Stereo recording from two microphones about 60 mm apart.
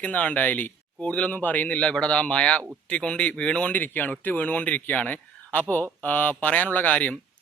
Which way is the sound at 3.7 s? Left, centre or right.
Left.